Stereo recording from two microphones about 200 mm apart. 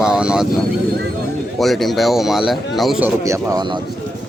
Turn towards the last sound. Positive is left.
turn(degrees=-20)  # may be behind; listen again after turning